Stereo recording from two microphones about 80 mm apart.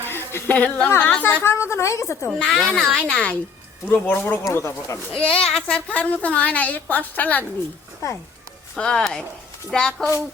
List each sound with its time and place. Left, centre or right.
0.0 s a sound: left
0.4 s a woman's voice: centre
1.4 s a woman's voice: left
2.4 s a child's voice: centre
3.8 s a woman's voice: left
4.4 s a woman's voice: left
5.1 s a woman's voice: centre
8.7 s a child's voice: centre